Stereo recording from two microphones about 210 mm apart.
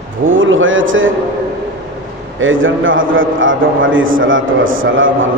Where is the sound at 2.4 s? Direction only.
65° right (ahead or behind).